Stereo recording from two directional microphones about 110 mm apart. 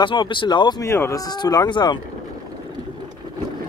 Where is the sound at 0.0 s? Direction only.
45° left (ahead or behind).